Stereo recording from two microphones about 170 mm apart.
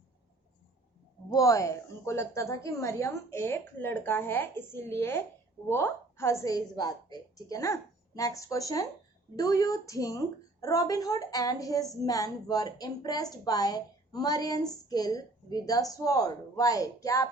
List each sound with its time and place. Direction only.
1.3 s a woman's voice: 20° left (ahead or behind)